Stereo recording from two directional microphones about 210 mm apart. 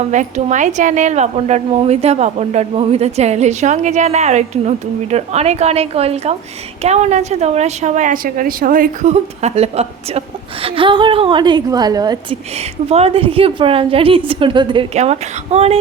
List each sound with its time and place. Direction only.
0.0 s a woman's voice: 35° right (ahead or behind)